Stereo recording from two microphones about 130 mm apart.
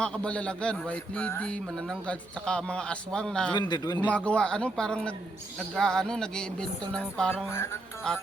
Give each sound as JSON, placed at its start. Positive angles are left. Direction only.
{"t": 0.0, "sound": "a man's voice", "side_deg": 10}
{"t": 3.5, "sound": "speech", "side_deg": 35}
{"t": 4.0, "sound": "a man's voice", "side_deg": 10}
{"t": 5.7, "sound": "music", "side_deg": 5}
{"t": 7.5, "sound": "music", "side_deg": 20}